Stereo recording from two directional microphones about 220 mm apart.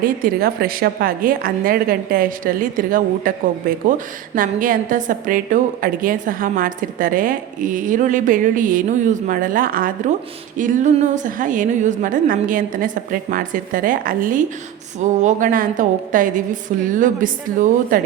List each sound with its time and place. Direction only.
0.3 s a woman's voice: 45° right (ahead or behind)
4.4 s a woman's voice: 40° right (ahead or behind)